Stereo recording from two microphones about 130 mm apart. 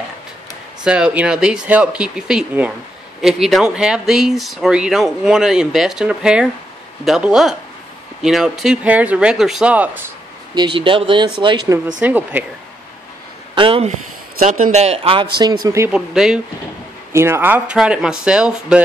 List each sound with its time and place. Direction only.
0.8 s speech: 5° right (ahead or behind)
10.5 s speech: 35° right (ahead or behind)
12.0 s speech: 15° right (ahead or behind)
13.6 s speech: 45° right (ahead or behind)
14.4 s a man's voice: 75° right (ahead or behind); by 15.1 s 55° right (ahead or behind)
15.1 s speech: 35° right (ahead or behind)
15.9 s speech: 5° right (ahead or behind)
17.1 s speech: 20° right (ahead or behind)